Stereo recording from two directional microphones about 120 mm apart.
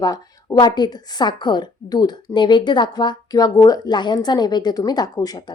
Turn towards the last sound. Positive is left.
turn(degrees=30)  # may be behind; listen again after turning